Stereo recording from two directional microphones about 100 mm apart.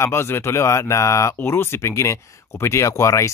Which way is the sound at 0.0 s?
25° left (ahead or behind).